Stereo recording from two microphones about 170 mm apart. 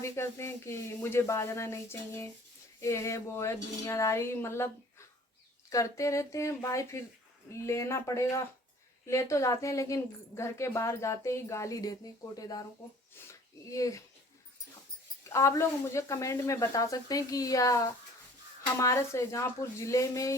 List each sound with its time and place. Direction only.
0.0 s speech: 15° left (ahead or behind)
5.7 s speech: 20° left (ahead or behind)
15.3 s speech: 15° left (ahead or behind)